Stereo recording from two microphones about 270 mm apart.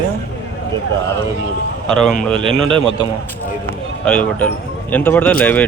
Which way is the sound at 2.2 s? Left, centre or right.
Centre.